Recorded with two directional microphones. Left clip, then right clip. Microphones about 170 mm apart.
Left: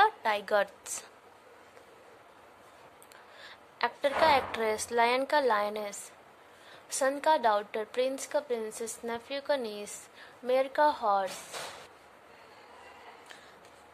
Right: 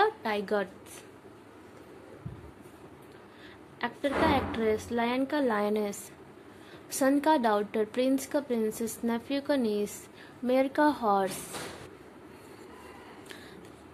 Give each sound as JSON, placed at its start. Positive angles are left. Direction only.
{"t": 0.0, "sound": "a sound", "side_deg": 10}
{"t": 3.7, "sound": "a woman's voice", "side_deg": 20}
{"t": 5.6, "sound": "a woman's voice", "side_deg": 0}